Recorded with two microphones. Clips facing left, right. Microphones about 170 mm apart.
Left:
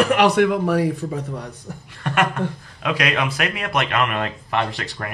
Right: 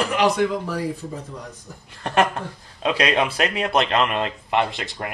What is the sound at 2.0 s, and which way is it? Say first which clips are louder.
Speech: even; 30° right (ahead or behind).